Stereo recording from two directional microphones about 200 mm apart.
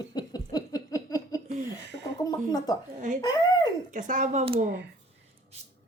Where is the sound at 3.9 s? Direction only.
40° right (ahead or behind).